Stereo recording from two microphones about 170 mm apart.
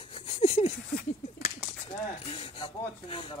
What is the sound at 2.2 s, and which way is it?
Speech, 35° left (ahead or behind).